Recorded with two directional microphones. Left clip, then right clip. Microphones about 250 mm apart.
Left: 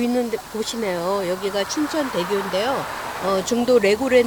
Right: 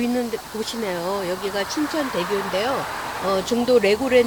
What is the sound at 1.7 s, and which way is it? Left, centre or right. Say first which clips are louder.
Speech: left 1 dB; left.